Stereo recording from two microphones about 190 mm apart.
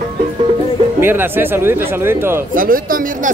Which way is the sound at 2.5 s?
45° right (ahead or behind).